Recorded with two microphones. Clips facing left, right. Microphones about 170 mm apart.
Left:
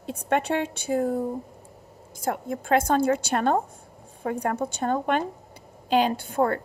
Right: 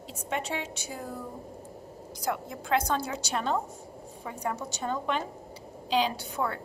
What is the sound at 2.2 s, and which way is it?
A woman's voice, 50° left (ahead or behind).